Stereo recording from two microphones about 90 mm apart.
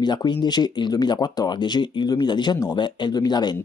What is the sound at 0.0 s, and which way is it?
Speech, 55° left (ahead or behind).